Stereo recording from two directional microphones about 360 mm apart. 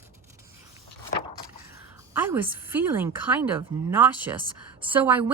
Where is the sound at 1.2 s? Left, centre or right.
Centre.